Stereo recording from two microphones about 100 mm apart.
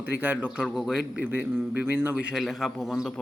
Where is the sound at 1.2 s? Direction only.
20° right (ahead or behind).